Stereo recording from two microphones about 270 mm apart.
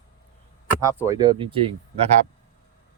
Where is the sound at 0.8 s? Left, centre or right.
Centre.